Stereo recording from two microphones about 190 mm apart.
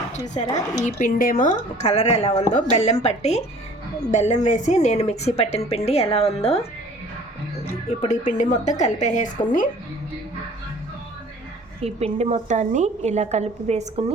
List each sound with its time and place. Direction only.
0.4 s speech: 20° left (ahead or behind)
0.9 s a woman's voice: 45° left (ahead or behind)
7.9 s a woman's voice: 35° left (ahead or behind)
11.8 s a woman's voice: 35° right (ahead or behind)